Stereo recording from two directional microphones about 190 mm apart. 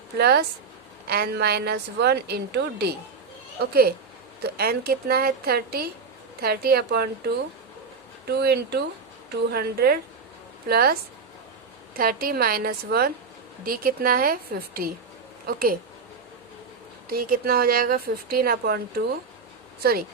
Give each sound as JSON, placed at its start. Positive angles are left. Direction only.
{"t": 0.2, "sound": "a woman's voice", "side_deg": -55}
{"t": 8.3, "sound": "a woman's voice", "side_deg": -60}
{"t": 11.9, "sound": "a woman's voice", "side_deg": -50}
{"t": 17.1, "sound": "a woman's voice", "side_deg": -50}